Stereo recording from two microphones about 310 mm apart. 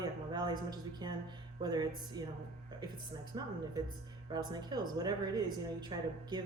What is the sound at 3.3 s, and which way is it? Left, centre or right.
A woman's voice, centre.